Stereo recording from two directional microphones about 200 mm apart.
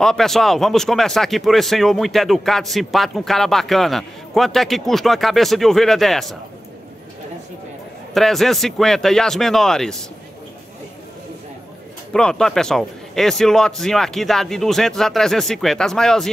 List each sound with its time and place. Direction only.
0.0 s speech: centre (ahead or behind)
8.1 s speech: centre (ahead or behind)
12.1 s speech: 5° left (ahead or behind)